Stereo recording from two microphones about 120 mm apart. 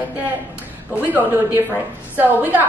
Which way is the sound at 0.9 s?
15° right (ahead or behind).